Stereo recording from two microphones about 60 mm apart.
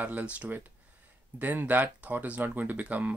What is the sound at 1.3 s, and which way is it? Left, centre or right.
Speech, right.